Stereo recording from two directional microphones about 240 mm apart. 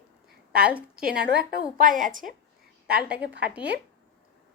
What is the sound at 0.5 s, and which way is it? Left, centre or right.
Speech, centre.